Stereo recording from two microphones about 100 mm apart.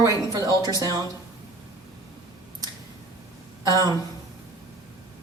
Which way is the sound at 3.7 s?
40° right (ahead or behind).